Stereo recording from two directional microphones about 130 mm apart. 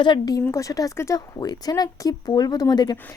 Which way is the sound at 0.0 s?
35° left (ahead or behind).